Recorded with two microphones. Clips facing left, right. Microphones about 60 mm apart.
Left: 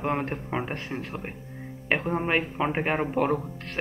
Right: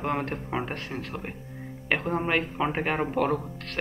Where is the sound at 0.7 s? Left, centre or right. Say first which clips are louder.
Left 1 dB; left.